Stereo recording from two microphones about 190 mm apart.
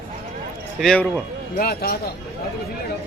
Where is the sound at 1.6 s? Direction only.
55° left (ahead or behind).